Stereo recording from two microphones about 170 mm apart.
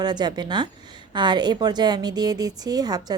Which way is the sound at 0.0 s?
25° right (ahead or behind).